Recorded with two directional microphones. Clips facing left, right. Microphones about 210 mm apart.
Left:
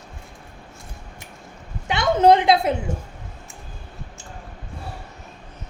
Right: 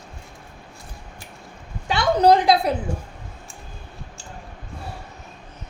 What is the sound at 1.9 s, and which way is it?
Speech, 25° left (ahead or behind).